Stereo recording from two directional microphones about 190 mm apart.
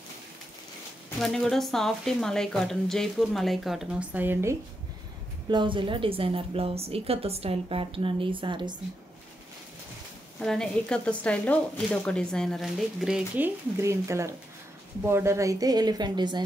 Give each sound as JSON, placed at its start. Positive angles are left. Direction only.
{"t": 1.2, "sound": "speech", "side_deg": 0}
{"t": 5.5, "sound": "a woman's voice", "side_deg": -25}
{"t": 10.4, "sound": "speech", "side_deg": 5}
{"t": 13.7, "sound": "a woman's voice", "side_deg": -15}